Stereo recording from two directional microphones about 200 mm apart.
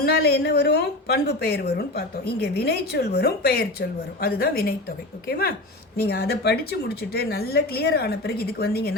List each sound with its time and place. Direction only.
0.0 s a woman's voice: 55° left (ahead or behind)